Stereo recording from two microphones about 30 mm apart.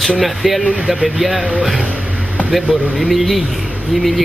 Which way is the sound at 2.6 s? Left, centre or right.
Right.